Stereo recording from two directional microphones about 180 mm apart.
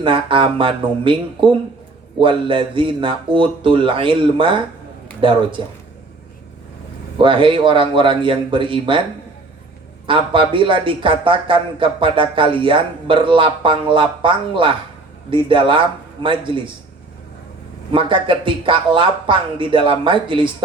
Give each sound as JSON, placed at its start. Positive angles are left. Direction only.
{"t": 0.0, "sound": "speech", "side_deg": -30}
{"t": 7.2, "sound": "speech", "side_deg": -30}
{"t": 10.1, "sound": "speech", "side_deg": -30}
{"t": 17.9, "sound": "speech", "side_deg": -30}